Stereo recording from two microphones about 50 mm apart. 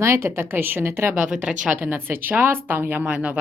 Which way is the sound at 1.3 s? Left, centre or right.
Centre.